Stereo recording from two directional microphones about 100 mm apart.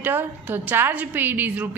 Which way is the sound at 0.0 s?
20° right (ahead or behind).